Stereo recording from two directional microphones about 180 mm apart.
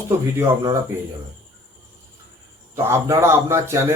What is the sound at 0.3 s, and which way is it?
Speech, 15° right (ahead or behind).